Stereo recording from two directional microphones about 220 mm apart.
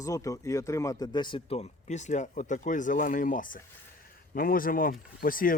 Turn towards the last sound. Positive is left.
turn(degrees=40)  # may be behind; listen again after turning